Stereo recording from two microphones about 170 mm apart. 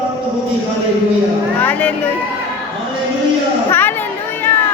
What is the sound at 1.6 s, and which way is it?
Music, 10° left (ahead or behind).